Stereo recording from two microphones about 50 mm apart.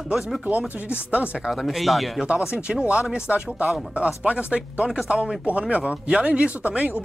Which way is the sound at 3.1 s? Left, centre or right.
Right.